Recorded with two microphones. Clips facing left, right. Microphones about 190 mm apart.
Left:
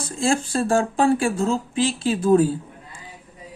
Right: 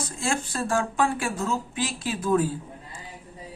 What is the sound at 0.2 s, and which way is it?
Speech, 30° left (ahead or behind).